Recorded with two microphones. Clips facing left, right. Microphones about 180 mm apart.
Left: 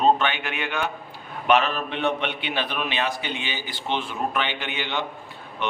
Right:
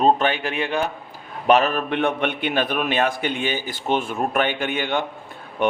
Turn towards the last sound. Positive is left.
turn(degrees=-45)  # may be behind; listen again after turning